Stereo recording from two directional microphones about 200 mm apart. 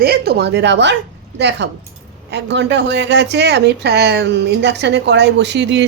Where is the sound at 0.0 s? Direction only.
50° right (ahead or behind).